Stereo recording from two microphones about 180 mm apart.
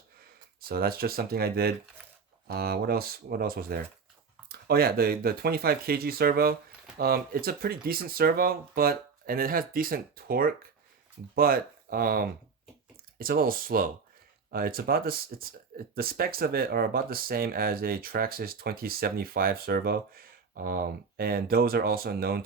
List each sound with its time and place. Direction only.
0.6 s speech: 55° right (ahead or behind)